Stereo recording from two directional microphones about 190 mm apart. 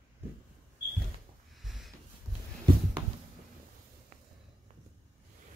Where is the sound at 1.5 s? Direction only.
Centre (ahead or behind).